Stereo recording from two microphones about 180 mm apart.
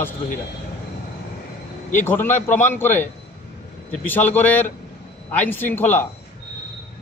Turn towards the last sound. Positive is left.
turn(degrees=10)  # may be behind; listen again after turning